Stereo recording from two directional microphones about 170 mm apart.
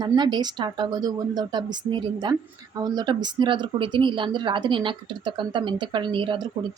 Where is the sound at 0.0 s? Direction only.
25° right (ahead or behind).